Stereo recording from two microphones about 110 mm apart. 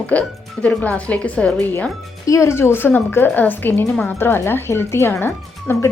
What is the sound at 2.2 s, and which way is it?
Speech, 30° left (ahead or behind).